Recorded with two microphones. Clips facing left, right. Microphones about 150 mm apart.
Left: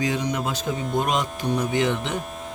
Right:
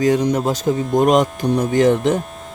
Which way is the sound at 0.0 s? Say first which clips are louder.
Right 9 dB; 45° right (ahead or behind).